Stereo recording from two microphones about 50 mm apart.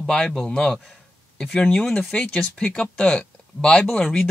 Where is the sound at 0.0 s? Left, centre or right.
Centre.